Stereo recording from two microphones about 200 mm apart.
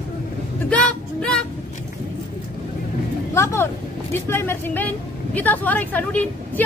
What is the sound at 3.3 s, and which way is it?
A woman's voice, 15° left (ahead or behind).